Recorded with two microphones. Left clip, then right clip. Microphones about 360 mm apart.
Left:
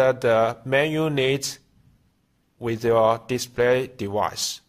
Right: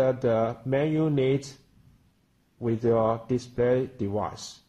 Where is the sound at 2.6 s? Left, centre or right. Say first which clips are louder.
Left 5 dB; left.